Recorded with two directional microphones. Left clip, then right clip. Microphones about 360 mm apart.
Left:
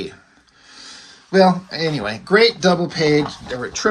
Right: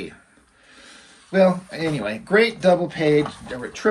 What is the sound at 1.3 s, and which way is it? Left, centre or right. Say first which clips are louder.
Speech: left 3 dB; centre.